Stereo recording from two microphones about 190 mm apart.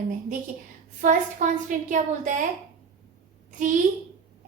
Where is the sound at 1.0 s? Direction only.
40° right (ahead or behind).